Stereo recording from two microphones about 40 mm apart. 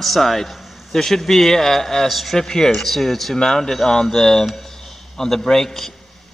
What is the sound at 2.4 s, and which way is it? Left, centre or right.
Speech, centre.